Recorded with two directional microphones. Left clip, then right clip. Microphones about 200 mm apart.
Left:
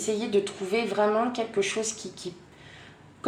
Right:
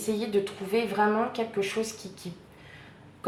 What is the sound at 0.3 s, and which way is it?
Speech, 35° left (ahead or behind).